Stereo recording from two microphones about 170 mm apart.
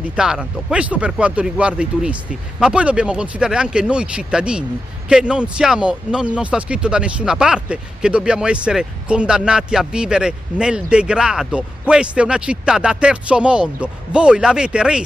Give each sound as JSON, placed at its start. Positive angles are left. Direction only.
{"t": 0.1, "sound": "speech", "side_deg": -5}